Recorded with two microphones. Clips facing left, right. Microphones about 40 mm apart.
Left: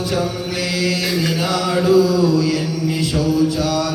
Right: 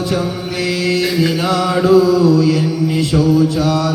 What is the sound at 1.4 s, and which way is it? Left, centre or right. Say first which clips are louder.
Mantra: right 4 dB; right.